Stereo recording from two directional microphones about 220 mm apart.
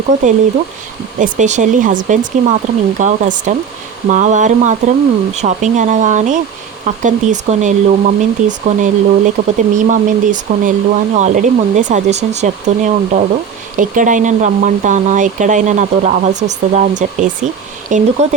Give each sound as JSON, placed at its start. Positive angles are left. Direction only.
{"t": 1.2, "sound": "speech", "side_deg": -35}